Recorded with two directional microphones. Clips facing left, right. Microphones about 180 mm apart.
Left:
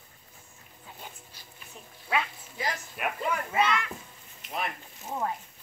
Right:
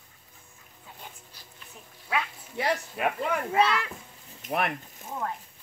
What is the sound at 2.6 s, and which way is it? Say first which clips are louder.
Speech: right 5 dB; 65° right (ahead or behind).